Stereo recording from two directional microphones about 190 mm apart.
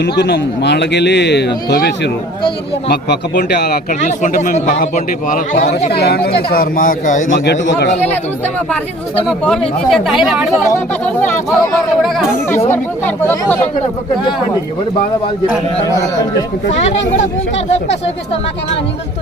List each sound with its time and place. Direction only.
0.0 s a man's voice: 60° left (ahead or behind)
2.9 s a man's voice: 55° left (ahead or behind)
4.0 s a man's voice: 40° left (ahead or behind)
5.9 s speech: 60° left (ahead or behind); by 7.3 s 45° left (ahead or behind)
7.3 s a man's voice: 70° left (ahead or behind)
9.2 s speech: centre (ahead or behind)